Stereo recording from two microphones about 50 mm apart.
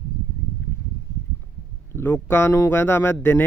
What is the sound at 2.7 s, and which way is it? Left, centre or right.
Speech, left.